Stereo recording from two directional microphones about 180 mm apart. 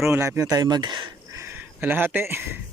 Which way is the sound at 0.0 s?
15° right (ahead or behind).